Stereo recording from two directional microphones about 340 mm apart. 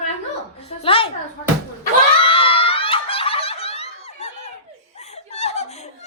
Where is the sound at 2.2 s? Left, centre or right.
Centre.